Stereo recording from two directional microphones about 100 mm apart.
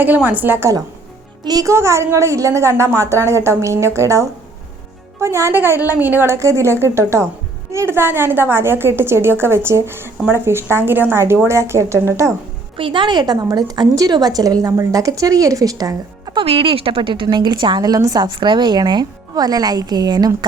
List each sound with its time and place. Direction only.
0.0 s a woman's voice: 15° right (ahead or behind)
1.5 s a woman's voice: 40° right (ahead or behind)
1.7 s a woman's voice: 30° right (ahead or behind)
12.7 s a woman's voice: 55° right (ahead or behind); by 16.4 s 40° right (ahead or behind)
16.4 s speech: 70° right (ahead or behind); by 18.3 s 40° right (ahead or behind)
18.3 s speech: 55° right (ahead or behind)